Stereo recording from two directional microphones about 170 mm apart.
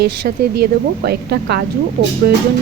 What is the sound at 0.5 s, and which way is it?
Speech, 70° right (ahead or behind).